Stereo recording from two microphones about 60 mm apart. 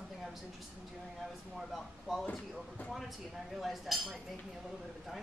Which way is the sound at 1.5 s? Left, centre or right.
Centre.